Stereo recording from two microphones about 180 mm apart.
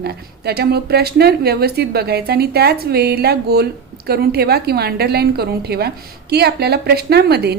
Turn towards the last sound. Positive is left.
turn(degrees=-65)  # may be behind; listen again after turning